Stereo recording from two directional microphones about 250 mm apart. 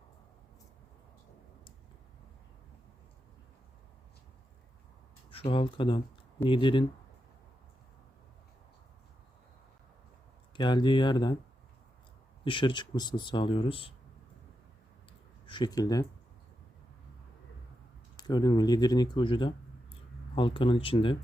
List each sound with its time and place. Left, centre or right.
5.3 s speech: left
10.6 s speech: centre
12.5 s speech: centre
15.4 s speech: centre
18.2 s speech: centre